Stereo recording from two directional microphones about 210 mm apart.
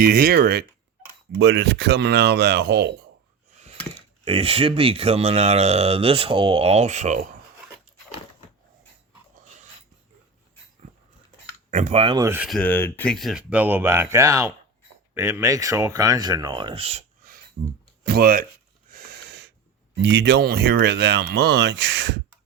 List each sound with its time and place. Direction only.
0.0 s speech: 45° right (ahead or behind)
1.4 s speech: 55° right (ahead or behind)
4.3 s speech: 25° right (ahead or behind)
11.7 s speech: 35° right (ahead or behind)
12.2 s speech: 10° right (ahead or behind)
12.5 s speech: 5° left (ahead or behind); by 18.4 s 45° right (ahead or behind)
18.9 s snort: 45° right (ahead or behind)
20.0 s speech: 55° right (ahead or behind)